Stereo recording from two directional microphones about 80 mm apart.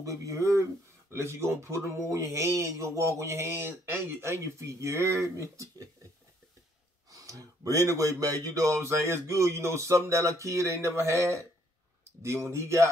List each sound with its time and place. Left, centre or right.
0.0 s speech: right
7.1 s speech: right